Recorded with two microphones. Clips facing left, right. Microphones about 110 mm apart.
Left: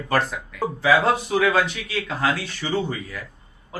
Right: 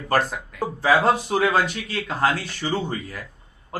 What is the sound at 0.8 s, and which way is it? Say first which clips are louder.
Speech: even; 35° right (ahead or behind).